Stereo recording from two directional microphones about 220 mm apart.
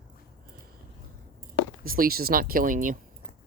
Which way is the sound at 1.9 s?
40° right (ahead or behind).